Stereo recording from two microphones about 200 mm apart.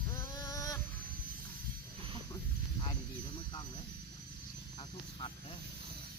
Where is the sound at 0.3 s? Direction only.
15° left (ahead or behind).